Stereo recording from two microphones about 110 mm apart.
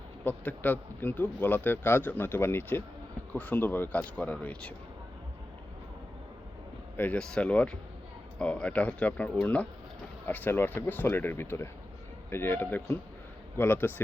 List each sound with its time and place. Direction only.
0.3 s a man's voice: 15° left (ahead or behind)
6.9 s a man's voice: 15° left (ahead or behind)